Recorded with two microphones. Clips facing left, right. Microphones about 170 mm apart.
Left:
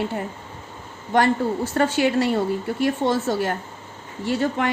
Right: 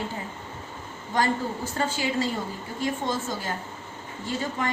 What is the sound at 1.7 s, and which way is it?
A woman's voice, 65° left (ahead or behind).